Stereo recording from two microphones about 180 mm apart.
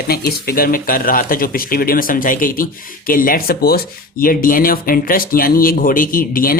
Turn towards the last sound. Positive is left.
turn(degrees=50)  # may be behind; listen again after turning